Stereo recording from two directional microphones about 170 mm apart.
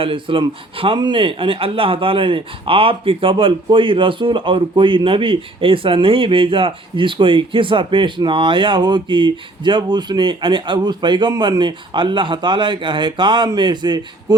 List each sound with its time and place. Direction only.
0.0 s speech: 30° right (ahead or behind)